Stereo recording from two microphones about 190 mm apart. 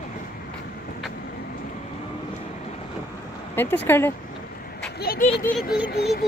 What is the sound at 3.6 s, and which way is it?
Speech, 10° left (ahead or behind).